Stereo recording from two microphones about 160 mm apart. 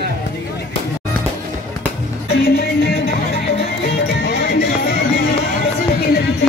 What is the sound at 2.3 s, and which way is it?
Music, 85° left.